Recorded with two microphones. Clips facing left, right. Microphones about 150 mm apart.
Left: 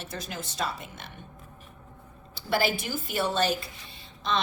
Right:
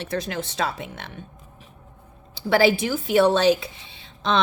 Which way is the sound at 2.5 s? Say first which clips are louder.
Right 8 dB; 80° right.